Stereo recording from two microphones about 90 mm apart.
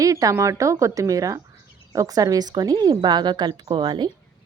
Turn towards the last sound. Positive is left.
turn(degrees=-55)  # may be behind; listen again after turning